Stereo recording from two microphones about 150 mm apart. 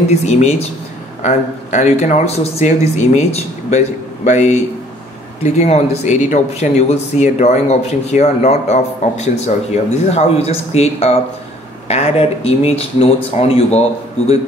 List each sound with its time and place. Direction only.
0.1 s speech: 45° left (ahead or behind)